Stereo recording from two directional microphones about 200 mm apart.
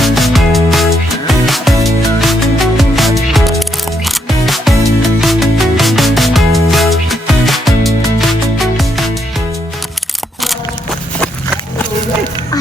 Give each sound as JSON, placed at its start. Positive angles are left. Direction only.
{"t": 0.0, "sound": "music", "side_deg": 0}